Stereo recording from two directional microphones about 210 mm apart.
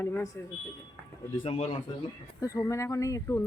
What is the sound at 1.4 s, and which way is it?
Speech, 30° left (ahead or behind).